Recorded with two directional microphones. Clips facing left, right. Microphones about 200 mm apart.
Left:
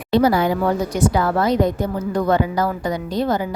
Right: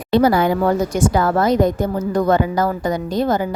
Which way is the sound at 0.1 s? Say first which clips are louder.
Right 2 dB; 55° right (ahead or behind).